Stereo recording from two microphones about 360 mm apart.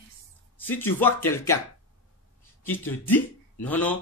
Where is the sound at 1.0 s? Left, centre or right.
Centre.